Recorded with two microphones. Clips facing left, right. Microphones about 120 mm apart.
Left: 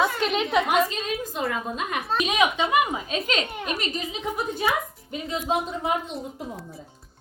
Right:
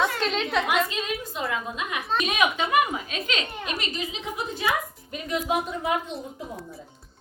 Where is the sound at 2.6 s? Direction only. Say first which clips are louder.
Left 1 dB; 20° left (ahead or behind).